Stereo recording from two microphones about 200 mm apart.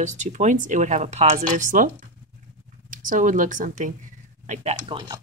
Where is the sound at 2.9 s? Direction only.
40° right (ahead or behind).